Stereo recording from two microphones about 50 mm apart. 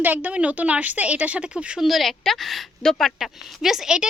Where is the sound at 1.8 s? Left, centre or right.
Centre.